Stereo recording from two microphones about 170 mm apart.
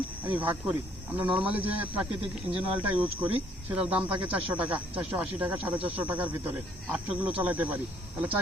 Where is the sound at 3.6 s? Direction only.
10° right (ahead or behind).